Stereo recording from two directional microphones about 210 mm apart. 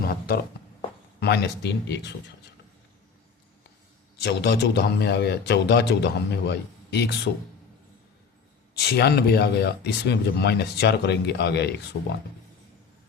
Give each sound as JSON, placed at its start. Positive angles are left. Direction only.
{"t": 0.0, "sound": "a sound", "side_deg": 45}
{"t": 1.2, "sound": "speech", "side_deg": 50}
{"t": 4.2, "sound": "speech", "side_deg": 50}
{"t": 8.8, "sound": "speech", "side_deg": 50}